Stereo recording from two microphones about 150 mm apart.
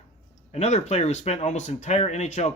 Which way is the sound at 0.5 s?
45° left (ahead or behind).